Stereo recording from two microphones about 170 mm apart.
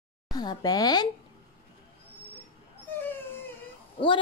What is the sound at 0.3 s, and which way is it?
Speech, 25° left (ahead or behind).